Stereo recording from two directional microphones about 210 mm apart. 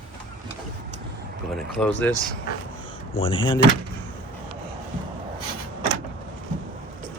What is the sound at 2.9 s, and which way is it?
Speech, 25° left (ahead or behind).